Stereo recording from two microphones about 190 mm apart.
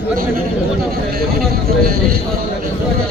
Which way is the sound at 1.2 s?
55° right (ahead or behind).